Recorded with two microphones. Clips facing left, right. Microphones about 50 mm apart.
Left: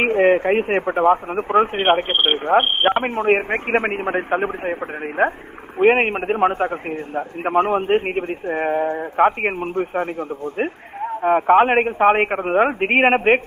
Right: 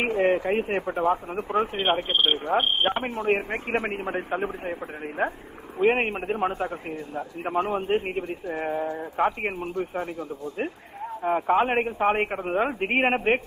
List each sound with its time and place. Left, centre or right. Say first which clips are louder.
0.0 s a man's voice: left 7 dB; left